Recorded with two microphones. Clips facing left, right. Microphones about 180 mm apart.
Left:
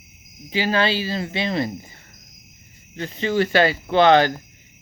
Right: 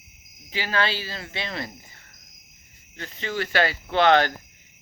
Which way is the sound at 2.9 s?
20° left (ahead or behind).